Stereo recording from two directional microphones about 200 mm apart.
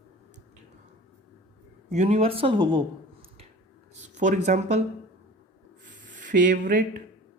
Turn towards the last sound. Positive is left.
turn(degrees=-40)  # may be behind; listen again after turning